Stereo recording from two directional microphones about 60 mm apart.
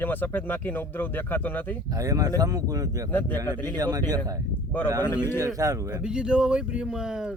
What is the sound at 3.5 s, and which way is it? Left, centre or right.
Speech, left.